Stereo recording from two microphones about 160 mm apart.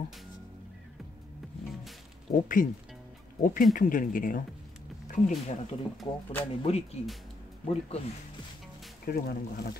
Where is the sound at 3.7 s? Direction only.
60° left (ahead or behind).